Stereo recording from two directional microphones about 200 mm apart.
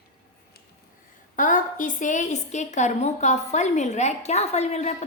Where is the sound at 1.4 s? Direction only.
40° left (ahead or behind).